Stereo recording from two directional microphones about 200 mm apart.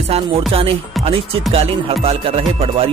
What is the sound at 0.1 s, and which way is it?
Music, 30° right (ahead or behind).